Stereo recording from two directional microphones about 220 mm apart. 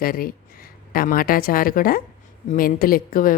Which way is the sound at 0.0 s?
40° left (ahead or behind).